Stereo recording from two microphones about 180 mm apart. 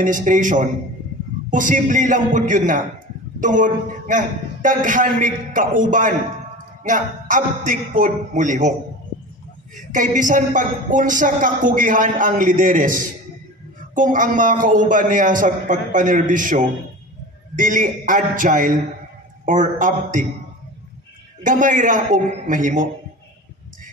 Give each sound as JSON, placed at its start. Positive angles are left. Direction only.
{"t": 0.0, "sound": "speech", "side_deg": -45}
{"t": 9.8, "sound": "speech", "side_deg": -45}
{"t": 21.4, "sound": "speech", "side_deg": -45}